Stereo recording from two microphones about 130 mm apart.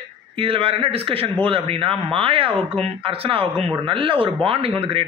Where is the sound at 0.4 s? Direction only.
45° right (ahead or behind).